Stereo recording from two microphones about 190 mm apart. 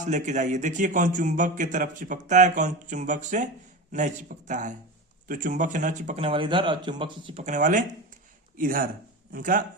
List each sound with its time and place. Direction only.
0.0 s a man's voice: 40° right (ahead or behind)
7.4 s speech: 40° right (ahead or behind)